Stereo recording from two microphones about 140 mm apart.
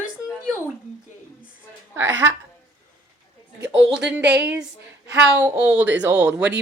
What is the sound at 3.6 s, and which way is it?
Speech, 10° right (ahead or behind).